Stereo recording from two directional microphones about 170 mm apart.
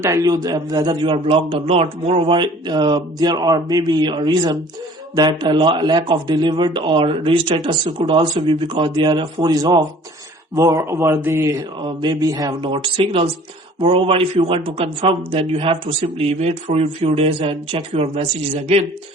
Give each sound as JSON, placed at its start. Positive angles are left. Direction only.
{"t": 0.0, "sound": "a man's voice", "side_deg": -20}